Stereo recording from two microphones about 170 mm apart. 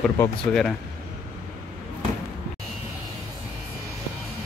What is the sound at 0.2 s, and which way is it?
Speech, 5° left (ahead or behind).